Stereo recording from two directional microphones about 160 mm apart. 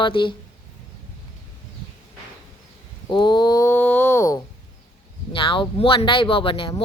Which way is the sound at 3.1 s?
30° left (ahead or behind).